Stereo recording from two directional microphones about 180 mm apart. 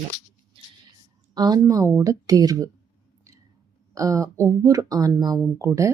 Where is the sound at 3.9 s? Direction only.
20° right (ahead or behind).